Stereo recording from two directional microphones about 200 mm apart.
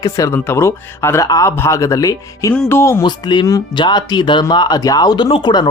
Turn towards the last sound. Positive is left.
turn(degrees=20)  # may be behind; listen again after turning